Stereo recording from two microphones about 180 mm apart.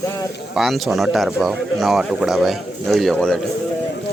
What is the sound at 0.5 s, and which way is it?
Speech, centre (ahead or behind).